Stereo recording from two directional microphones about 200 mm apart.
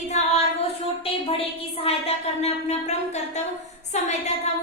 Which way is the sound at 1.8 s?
30° left (ahead or behind).